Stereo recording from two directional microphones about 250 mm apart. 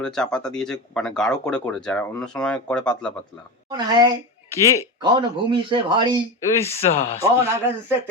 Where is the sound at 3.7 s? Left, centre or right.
Centre.